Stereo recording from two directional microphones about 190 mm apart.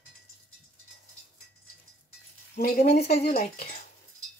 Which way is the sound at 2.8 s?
35° left (ahead or behind).